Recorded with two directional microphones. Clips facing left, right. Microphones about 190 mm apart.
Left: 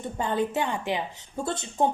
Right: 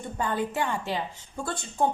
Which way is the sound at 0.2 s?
20° left (ahead or behind).